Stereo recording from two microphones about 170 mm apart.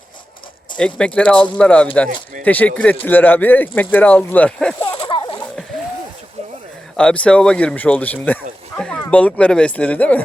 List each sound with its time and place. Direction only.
0.8 s speech: 5° left (ahead or behind)
4.9 s a sound: 30° left (ahead or behind)
6.9 s speech: 5° left (ahead or behind)